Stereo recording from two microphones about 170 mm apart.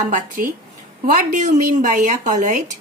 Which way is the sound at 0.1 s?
50° right (ahead or behind).